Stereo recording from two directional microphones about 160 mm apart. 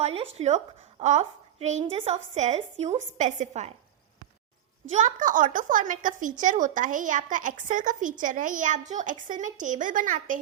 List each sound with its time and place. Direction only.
0.0 s a woman's voice: 35° right (ahead or behind)
4.9 s speech: 50° right (ahead or behind)